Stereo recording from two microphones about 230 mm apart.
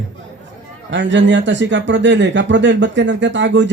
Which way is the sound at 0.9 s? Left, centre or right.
Right.